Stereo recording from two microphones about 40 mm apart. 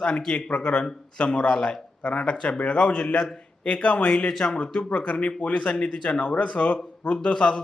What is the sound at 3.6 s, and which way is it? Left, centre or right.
Speech, left.